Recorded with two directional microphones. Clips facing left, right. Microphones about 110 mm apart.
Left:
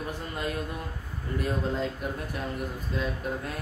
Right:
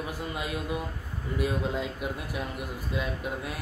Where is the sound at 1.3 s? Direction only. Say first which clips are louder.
Even; 10° right (ahead or behind).